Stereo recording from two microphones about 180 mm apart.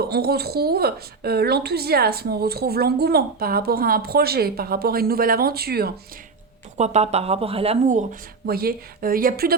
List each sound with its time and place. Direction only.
0.1 s a woman's voice: 60° right (ahead or behind)
6.7 s speech: 40° right (ahead or behind)
8.4 s a woman's voice: 55° right (ahead or behind)